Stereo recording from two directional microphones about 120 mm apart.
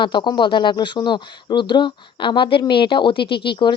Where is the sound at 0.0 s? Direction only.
40° left (ahead or behind).